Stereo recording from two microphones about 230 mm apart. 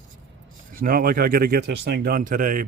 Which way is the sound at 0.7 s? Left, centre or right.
Right.